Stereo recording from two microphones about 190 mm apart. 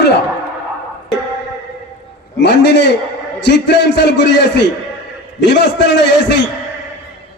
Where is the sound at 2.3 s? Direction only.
65° left (ahead or behind).